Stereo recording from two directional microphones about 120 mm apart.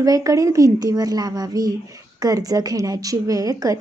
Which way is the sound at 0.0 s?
30° right (ahead or behind).